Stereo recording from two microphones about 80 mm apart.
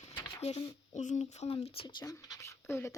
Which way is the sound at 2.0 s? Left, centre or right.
Left.